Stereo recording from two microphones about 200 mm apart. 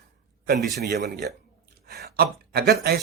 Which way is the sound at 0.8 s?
55° right (ahead or behind).